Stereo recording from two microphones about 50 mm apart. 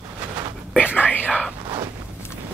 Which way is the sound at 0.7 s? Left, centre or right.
Left.